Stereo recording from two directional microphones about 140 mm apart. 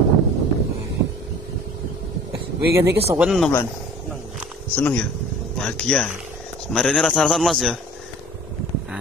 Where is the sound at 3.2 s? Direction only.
Centre (ahead or behind).